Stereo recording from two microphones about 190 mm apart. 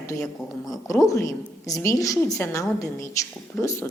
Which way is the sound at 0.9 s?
15° left (ahead or behind).